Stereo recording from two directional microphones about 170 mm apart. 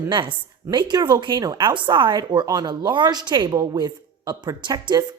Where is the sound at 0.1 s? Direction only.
25° right (ahead or behind).